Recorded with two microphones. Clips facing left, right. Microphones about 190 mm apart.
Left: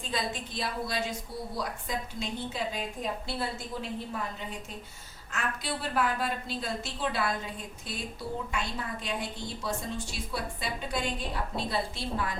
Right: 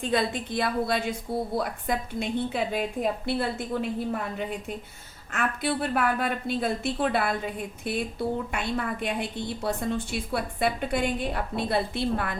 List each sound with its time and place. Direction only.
0.0 s a woman's voice: 60° right (ahead or behind)